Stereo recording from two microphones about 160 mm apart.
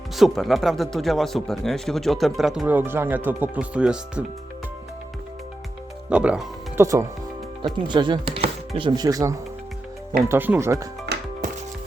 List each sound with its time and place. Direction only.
0.2 s speech: centre (ahead or behind)
6.1 s speech: 5° right (ahead or behind)
6.8 s speech: 20° right (ahead or behind)
10.2 s speech: 10° right (ahead or behind)
11.1 s music: 90° right